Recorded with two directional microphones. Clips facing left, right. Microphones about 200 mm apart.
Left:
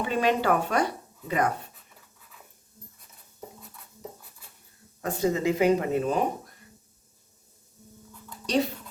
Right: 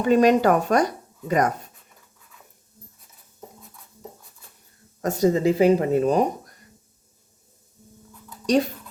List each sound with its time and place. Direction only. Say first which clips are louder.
0.0 s speech: right 8 dB; 40° right (ahead or behind)
5.0 s speech: right 6 dB; 40° right (ahead or behind)